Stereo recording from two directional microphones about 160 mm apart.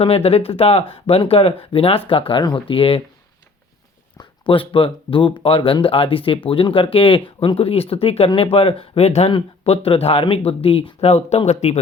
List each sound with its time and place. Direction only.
0.0 s speech: 40° left (ahead or behind)
4.2 s speech: 35° left (ahead or behind)